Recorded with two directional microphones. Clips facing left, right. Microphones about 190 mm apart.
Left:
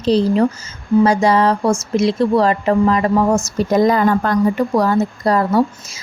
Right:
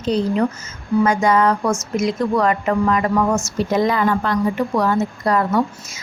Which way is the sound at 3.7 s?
40° left (ahead or behind).